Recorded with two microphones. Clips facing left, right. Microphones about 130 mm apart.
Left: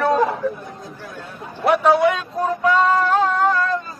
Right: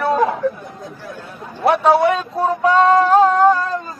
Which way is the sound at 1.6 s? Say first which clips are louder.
Right 2 dB; 30° right (ahead or behind).